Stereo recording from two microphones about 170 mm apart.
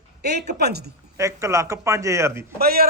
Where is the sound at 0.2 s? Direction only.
75° right (ahead or behind).